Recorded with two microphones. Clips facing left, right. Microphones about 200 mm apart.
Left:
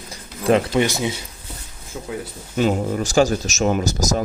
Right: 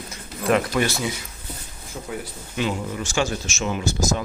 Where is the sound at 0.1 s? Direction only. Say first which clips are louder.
Left 4 dB; 30° left (ahead or behind).